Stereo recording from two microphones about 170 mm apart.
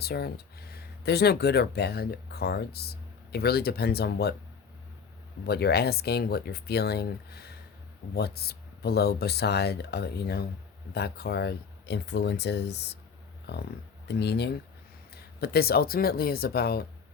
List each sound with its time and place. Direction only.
0.0 s speech: 70° left (ahead or behind)
5.5 s speech: 70° left (ahead or behind)
14.1 s speech: 75° left (ahead or behind)